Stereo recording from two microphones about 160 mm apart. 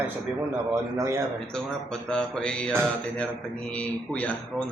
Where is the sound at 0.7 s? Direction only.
20° right (ahead or behind).